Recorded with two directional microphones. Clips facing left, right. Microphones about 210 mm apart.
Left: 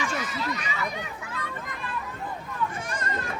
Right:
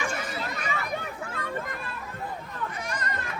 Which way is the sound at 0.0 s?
55° right (ahead or behind).